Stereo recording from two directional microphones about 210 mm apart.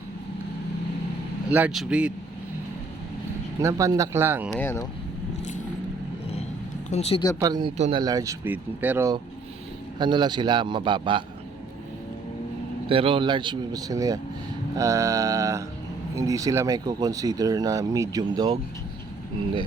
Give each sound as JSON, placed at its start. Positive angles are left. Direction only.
{"t": 1.5, "sound": "speech", "side_deg": -5}
{"t": 3.6, "sound": "speech", "side_deg": -15}
{"t": 4.5, "sound": "speech", "side_deg": 10}
{"t": 6.9, "sound": "speech", "side_deg": 30}
{"t": 7.3, "sound": "speech", "side_deg": -20}
{"t": 10.0, "sound": "speech", "side_deg": -20}
{"t": 12.9, "sound": "speech", "side_deg": -25}